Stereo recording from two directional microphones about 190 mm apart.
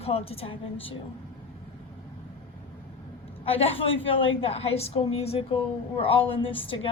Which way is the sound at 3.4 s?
30° left (ahead or behind).